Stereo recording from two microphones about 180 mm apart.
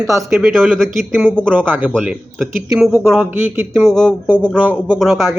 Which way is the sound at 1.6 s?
10° right (ahead or behind).